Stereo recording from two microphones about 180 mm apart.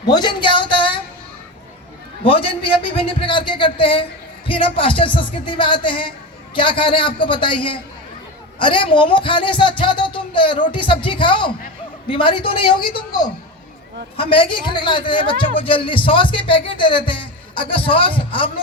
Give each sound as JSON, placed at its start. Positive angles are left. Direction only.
{"t": 0.1, "sound": "a man's voice", "side_deg": 25}
{"t": 2.2, "sound": "a man's voice", "side_deg": 30}
{"t": 14.2, "sound": "a man's voice", "side_deg": 30}